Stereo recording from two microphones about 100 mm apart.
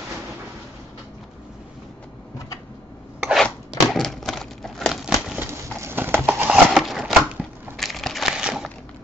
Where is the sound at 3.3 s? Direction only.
5° left (ahead or behind).